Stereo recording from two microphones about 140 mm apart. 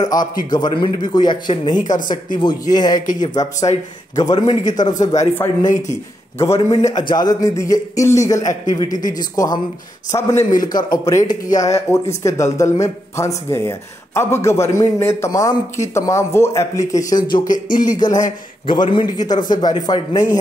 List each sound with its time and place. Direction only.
0.0 s a man's voice: 30° left (ahead or behind)
5.2 s speech: 15° left (ahead or behind)
5.7 s a man's voice: 60° left (ahead or behind)
6.9 s a man's voice: 30° left (ahead or behind)
17.5 s music: 70° left (ahead or behind)
17.9 s a man's voice: 30° left (ahead or behind)